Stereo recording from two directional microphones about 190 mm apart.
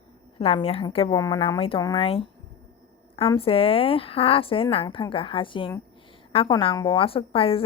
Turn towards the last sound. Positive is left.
turn(degrees=30)  # may be behind; listen again after turning